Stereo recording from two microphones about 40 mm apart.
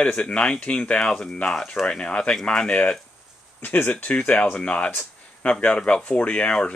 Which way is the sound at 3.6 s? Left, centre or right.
Left.